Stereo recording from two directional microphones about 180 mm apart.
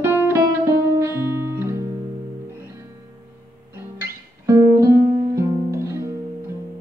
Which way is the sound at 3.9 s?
15° right (ahead or behind).